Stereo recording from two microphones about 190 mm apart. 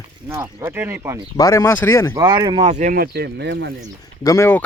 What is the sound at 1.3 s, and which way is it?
Speech, 15° left (ahead or behind).